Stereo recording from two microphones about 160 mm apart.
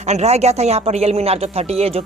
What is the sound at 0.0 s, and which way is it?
Speech, 45° right (ahead or behind).